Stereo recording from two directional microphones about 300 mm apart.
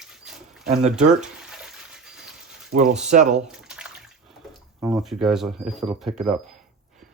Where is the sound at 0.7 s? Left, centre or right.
Right.